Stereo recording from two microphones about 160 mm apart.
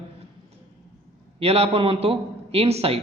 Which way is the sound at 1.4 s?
40° right (ahead or behind).